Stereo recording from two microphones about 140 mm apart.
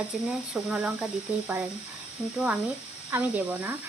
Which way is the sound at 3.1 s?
15° right (ahead or behind).